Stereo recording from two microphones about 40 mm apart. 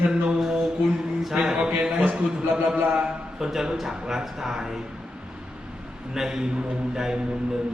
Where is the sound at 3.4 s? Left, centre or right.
Centre.